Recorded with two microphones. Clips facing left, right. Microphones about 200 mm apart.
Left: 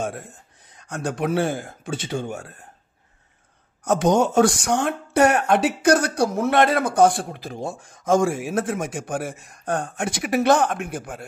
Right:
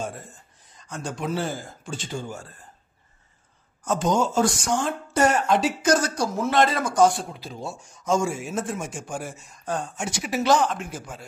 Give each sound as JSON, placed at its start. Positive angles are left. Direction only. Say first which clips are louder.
{"t": 0.0, "sound": "speech", "louder": "left 4 dB", "side_deg": 70}
{"t": 3.8, "sound": "speech", "louder": "left 4 dB", "side_deg": 70}